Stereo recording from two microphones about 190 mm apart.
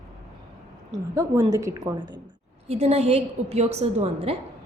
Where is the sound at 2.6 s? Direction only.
35° right (ahead or behind).